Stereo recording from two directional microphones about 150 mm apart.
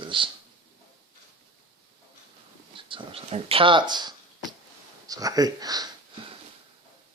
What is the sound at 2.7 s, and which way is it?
Speech, 35° right (ahead or behind).